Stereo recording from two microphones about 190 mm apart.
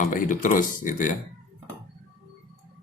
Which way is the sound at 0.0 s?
45° left (ahead or behind).